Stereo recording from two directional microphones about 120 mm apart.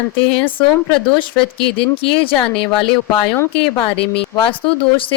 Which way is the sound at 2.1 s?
50° left (ahead or behind).